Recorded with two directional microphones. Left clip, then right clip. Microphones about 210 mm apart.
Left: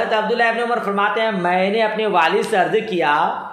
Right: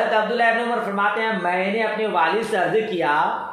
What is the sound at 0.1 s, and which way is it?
Speech, 30° left (ahead or behind).